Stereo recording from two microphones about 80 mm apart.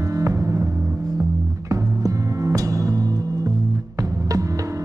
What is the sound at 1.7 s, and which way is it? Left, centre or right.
Music, right.